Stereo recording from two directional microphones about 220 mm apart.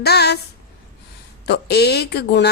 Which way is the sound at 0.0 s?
50° left (ahead or behind).